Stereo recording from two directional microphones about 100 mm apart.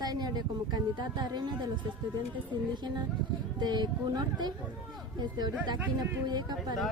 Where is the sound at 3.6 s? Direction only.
45° right (ahead or behind).